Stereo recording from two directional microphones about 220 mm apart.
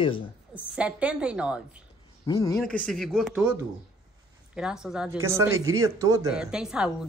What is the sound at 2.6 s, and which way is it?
A woman's voice, 5° left (ahead or behind).